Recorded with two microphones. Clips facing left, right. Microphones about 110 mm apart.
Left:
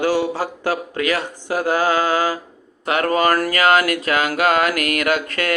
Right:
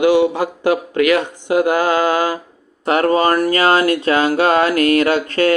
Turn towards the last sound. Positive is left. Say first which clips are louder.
# right 5 dB
turn(degrees=-30)  # may be behind; listen again after turning